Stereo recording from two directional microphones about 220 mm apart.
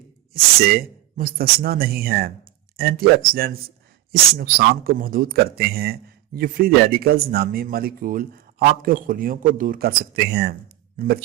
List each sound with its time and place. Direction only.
0.7 s a man's voice: 40° right (ahead or behind)